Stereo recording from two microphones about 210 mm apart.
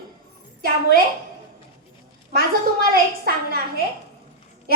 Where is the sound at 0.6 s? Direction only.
45° right (ahead or behind).